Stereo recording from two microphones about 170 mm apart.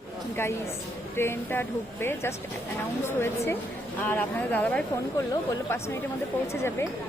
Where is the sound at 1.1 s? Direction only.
15° left (ahead or behind).